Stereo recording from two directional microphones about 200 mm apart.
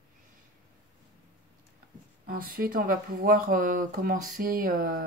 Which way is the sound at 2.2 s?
45° right (ahead or behind).